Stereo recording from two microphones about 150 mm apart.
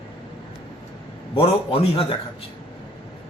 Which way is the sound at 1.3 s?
40° left (ahead or behind).